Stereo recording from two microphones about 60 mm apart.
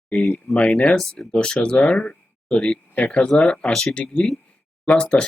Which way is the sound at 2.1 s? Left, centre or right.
Centre.